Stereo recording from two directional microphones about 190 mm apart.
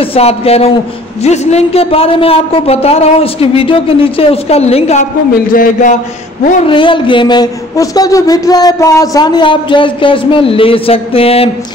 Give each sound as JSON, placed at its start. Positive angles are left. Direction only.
{"t": 0.0, "sound": "a man's voice", "side_deg": 30}
{"t": 5.5, "sound": "speech", "side_deg": 45}
{"t": 6.6, "sound": "a man's voice", "side_deg": 25}